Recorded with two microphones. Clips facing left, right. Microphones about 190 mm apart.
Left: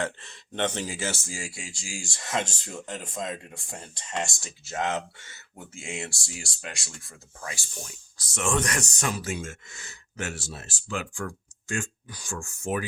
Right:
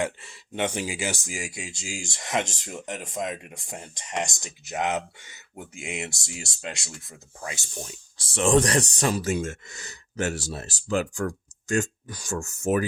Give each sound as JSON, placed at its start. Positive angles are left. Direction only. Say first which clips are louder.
{"t": 0.0, "sound": "speech", "louder": "right 3 dB", "side_deg": -10}